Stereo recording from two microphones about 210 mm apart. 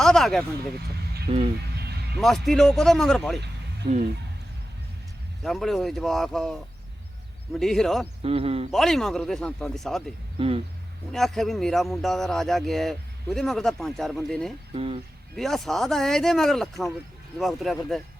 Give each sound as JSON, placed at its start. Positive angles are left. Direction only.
{"t": 0.0, "sound": "a sound", "side_deg": 0}
{"t": 1.3, "sound": "speech", "side_deg": -30}
{"t": 2.1, "sound": "a man's voice", "side_deg": 0}
{"t": 5.4, "sound": "a man's voice", "side_deg": 0}
{"t": 7.6, "sound": "a man's voice", "side_deg": 0}
{"t": 8.2, "sound": "a man's voice", "side_deg": -25}
{"t": 8.7, "sound": "a man's voice", "side_deg": 0}
{"t": 10.3, "sound": "speech", "side_deg": -25}
{"t": 11.1, "sound": "a man's voice", "side_deg": 0}
{"t": 14.7, "sound": "a man's voice", "side_deg": -25}
{"t": 15.4, "sound": "a man's voice", "side_deg": 0}